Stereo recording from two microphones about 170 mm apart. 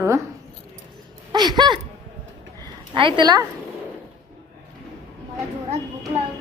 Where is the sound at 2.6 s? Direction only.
30° right (ahead or behind).